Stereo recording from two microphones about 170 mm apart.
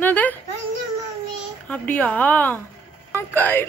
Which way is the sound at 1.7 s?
10° left (ahead or behind).